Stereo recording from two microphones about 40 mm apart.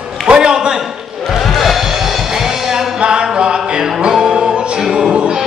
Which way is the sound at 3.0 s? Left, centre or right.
Right.